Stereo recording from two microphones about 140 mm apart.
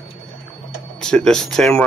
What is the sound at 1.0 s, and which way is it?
Speech, 5° left (ahead or behind).